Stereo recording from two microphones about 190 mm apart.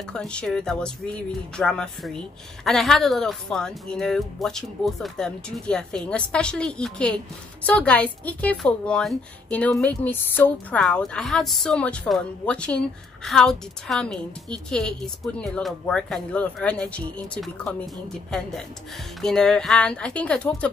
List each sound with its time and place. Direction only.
0.1 s a woman's voice: 5° left (ahead or behind)